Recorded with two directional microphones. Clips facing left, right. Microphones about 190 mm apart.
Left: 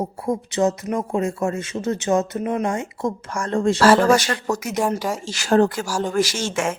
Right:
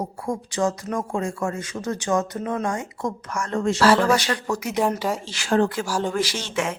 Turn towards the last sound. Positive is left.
turn(degrees=45)  # may be behind; listen again after turning